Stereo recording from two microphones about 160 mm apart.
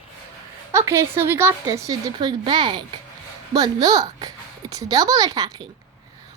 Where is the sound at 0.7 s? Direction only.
15° right (ahead or behind).